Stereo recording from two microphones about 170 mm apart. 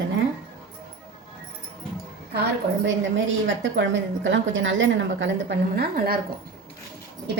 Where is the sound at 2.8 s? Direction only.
90° right; by 6.1 s 70° right (ahead or behind).